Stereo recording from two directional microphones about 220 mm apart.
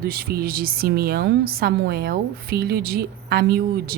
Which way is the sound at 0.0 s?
45° right (ahead or behind).